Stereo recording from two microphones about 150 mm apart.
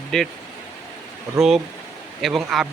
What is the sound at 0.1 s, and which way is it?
Speech, centre (ahead or behind).